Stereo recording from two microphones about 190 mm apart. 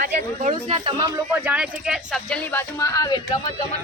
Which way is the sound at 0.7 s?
25° right (ahead or behind).